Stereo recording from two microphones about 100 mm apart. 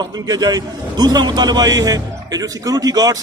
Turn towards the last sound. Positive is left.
turn(degrees=-40)  # may be behind; listen again after turning